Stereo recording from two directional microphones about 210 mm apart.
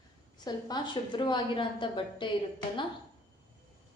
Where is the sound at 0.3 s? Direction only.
20° left (ahead or behind).